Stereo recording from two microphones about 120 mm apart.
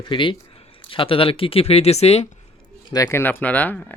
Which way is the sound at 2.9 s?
25° left (ahead or behind).